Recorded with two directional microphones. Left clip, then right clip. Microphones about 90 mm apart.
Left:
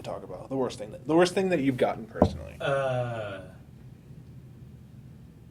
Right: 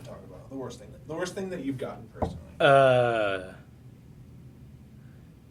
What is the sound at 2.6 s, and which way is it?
Speech, 45° right (ahead or behind).